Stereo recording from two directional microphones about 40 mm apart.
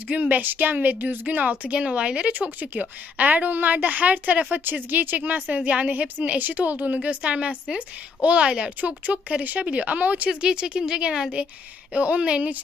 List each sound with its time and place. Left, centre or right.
0.1 s a woman's voice: right
1.2 s a woman's voice: right
2.6 s a woman's voice: right
4.5 s a woman's voice: right
9.4 s a woman's voice: right
10.2 s speech: right
11.9 s a woman's voice: right